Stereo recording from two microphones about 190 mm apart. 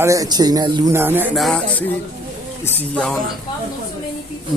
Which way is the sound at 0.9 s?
10° right (ahead or behind).